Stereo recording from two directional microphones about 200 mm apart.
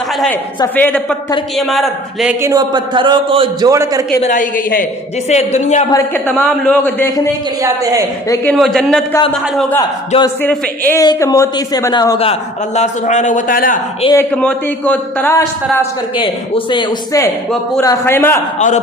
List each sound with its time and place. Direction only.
0.6 s a man's voice: 10° left (ahead or behind)
2.4 s a man's voice: 20° right (ahead or behind)
3.7 s a man's voice: 15° right (ahead or behind)
4.2 s a woman's voice: 40° left (ahead or behind)
5.9 s a man's voice: 10° left (ahead or behind)
8.5 s a man's voice: centre (ahead or behind)
10.2 s a man's voice: 15° left (ahead or behind); by 13.7 s 45° left (ahead or behind)
14.0 s a man's voice: 15° left (ahead or behind)
16.1 s a man's voice: 25° left (ahead or behind)